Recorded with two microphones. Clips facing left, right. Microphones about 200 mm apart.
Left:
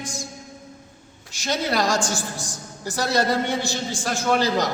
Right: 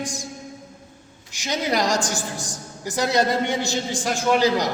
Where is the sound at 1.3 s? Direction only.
15° right (ahead or behind).